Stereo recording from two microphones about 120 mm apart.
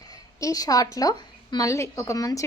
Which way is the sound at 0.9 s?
35° left (ahead or behind).